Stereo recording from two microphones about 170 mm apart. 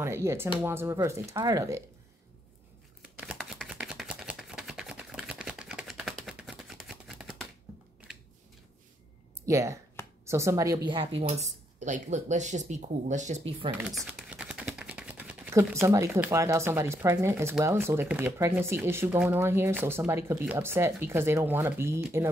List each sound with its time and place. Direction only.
0.0 s speech: 15° right (ahead or behind)
3.0 s a sound: 5° right (ahead or behind)
9.5 s speech: 15° right (ahead or behind)
11.8 s speech: 45° right (ahead or behind)
13.6 s speech: 25° right (ahead or behind)
14.3 s speech: 5° right (ahead or behind)